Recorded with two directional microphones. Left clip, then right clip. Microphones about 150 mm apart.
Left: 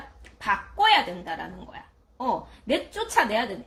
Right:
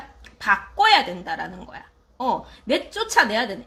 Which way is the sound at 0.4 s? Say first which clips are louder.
Right 4 dB; 20° right (ahead or behind).